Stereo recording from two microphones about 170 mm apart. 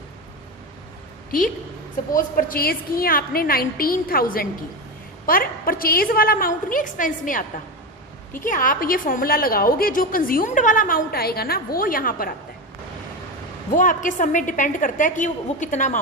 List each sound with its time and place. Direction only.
2.1 s a woman's voice: 55° left (ahead or behind)
13.7 s a woman's voice: 50° left (ahead or behind)